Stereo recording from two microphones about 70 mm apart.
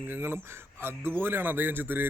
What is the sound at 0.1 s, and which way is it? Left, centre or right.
A man's voice, right.